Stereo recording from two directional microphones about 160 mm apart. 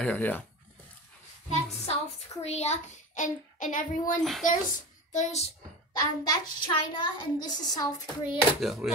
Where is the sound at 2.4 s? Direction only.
45° left (ahead or behind).